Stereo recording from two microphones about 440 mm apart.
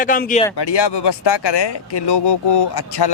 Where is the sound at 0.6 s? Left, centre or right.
Left.